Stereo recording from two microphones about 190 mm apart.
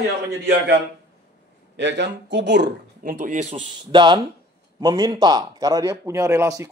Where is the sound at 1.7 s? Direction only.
65° right (ahead or behind).